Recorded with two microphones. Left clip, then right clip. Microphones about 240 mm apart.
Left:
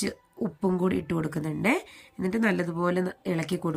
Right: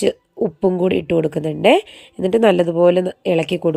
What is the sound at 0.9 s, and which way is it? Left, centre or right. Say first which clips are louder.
Speech: right 13 dB; right.